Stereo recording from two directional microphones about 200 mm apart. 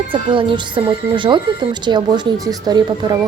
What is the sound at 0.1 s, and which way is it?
Speech, 25° right (ahead or behind).